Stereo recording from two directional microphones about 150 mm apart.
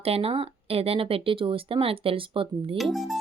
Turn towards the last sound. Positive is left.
turn(degrees=0)  # may be behind; listen again after turning